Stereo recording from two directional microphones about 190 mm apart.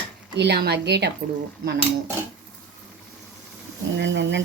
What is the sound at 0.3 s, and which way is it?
Speech, 60° right (ahead or behind).